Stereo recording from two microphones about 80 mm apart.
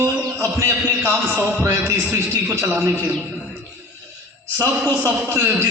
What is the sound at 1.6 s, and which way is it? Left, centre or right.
Speech, right.